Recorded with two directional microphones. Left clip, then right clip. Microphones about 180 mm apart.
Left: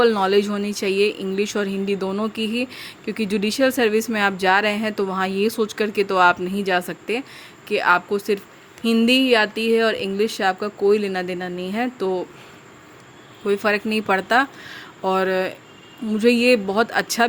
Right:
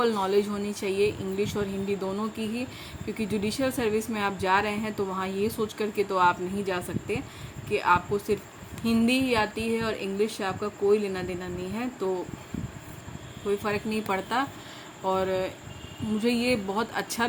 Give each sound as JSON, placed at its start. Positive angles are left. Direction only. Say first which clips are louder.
{"t": 0.0, "sound": "speech", "louder": "left 8 dB", "side_deg": 50}
{"t": 13.5, "sound": "speech", "louder": "left 8 dB", "side_deg": 55}